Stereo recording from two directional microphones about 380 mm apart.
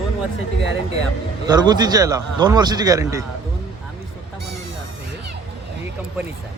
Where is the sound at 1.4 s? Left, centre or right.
Centre.